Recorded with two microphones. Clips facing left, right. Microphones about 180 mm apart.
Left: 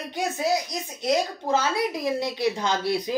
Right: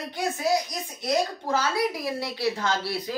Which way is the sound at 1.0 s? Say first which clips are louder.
Left 1 dB; 20° left (ahead or behind).